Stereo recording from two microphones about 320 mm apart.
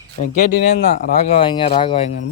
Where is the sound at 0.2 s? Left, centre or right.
Left.